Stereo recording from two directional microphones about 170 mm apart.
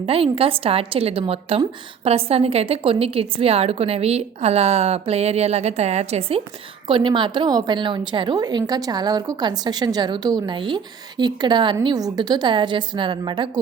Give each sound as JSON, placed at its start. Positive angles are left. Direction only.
{"t": 0.0, "sound": "a woman's voice", "side_deg": -35}